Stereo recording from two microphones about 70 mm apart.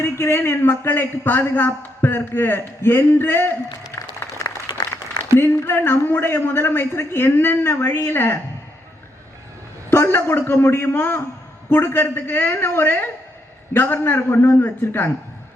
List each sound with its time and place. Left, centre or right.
0.0 s a man's voice: left
3.8 s applause: left
5.4 s a man's voice: left
9.9 s a man's voice: left